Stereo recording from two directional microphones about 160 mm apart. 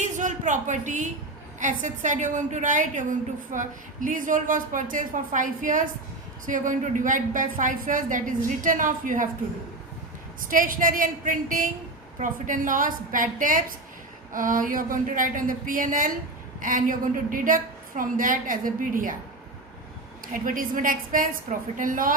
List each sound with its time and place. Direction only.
0.0 s a sound: 50° right (ahead or behind)
1.5 s a woman's voice: 50° right (ahead or behind)
10.5 s a woman's voice: 55° right (ahead or behind)
20.2 s a woman's voice: 55° right (ahead or behind)